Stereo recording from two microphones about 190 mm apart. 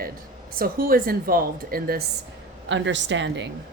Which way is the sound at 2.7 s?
75° right (ahead or behind).